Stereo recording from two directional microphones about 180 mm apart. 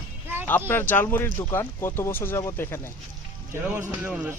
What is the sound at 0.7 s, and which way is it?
Speech, 10° left (ahead or behind).